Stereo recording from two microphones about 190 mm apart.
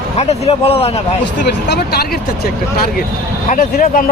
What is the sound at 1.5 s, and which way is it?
Speech, 60° left (ahead or behind).